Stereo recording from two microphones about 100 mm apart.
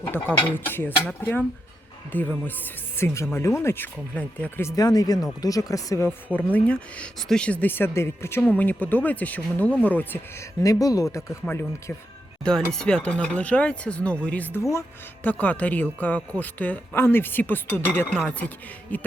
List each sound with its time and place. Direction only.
0.0 s a man's voice: 20° left (ahead or behind)
4.1 s a man's voice: 15° left (ahead or behind)
4.6 s a man's voice: 40° left (ahead or behind); by 10.2 s 15° left (ahead or behind)
10.6 s speech: 35° left (ahead or behind)
12.7 s a man's voice: 10° left (ahead or behind)